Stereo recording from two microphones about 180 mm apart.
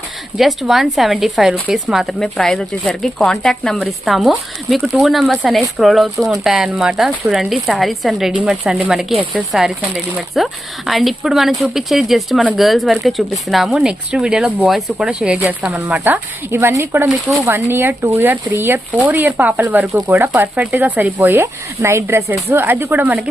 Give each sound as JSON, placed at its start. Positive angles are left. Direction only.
{"t": 0.3, "sound": "speech", "side_deg": 0}